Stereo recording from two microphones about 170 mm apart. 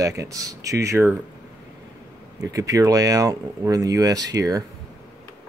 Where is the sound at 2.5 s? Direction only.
20° right (ahead or behind).